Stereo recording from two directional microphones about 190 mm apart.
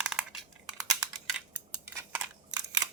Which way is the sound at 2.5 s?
20° right (ahead or behind).